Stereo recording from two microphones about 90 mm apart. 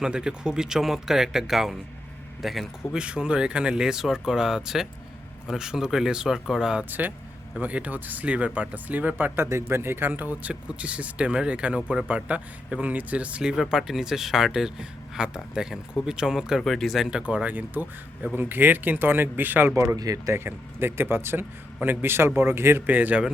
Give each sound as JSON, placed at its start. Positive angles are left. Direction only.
{"t": 0.0, "sound": "speech", "side_deg": -10}
{"t": 20.0, "sound": "speech", "side_deg": -40}
{"t": 20.3, "sound": "speech", "side_deg": -25}